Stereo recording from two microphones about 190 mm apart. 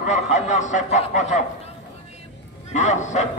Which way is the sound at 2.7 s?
40° left (ahead or behind).